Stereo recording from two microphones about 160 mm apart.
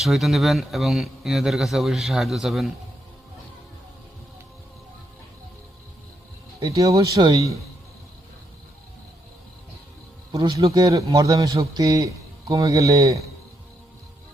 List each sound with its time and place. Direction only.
0.0 s a man's voice: centre (ahead or behind)
6.7 s a man's voice: 20° right (ahead or behind)
10.3 s a man's voice: 20° right (ahead or behind)